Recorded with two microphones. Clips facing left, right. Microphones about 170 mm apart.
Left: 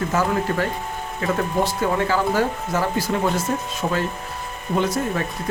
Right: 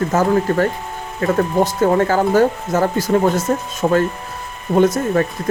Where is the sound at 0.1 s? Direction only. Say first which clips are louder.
Right 6 dB; 45° right (ahead or behind).